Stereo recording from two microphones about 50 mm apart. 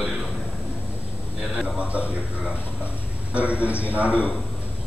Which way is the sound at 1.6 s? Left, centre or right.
Right.